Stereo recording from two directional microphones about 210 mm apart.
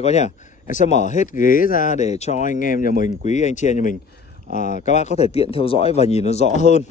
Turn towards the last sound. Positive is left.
turn(degrees=30)  # may be behind; listen again after turning